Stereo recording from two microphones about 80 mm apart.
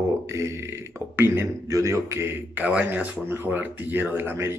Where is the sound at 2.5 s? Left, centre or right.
Centre.